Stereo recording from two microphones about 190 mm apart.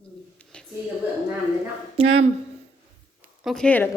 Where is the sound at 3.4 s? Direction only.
5° left (ahead or behind).